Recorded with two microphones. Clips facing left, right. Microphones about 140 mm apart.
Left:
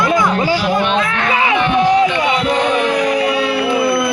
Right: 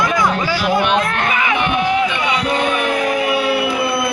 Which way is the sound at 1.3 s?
30° left (ahead or behind).